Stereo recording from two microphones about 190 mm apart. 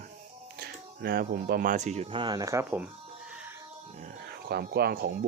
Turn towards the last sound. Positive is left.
turn(degrees=-55)  # may be behind; listen again after turning